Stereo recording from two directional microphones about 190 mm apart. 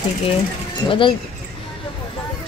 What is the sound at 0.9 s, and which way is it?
Speech, 25° left (ahead or behind).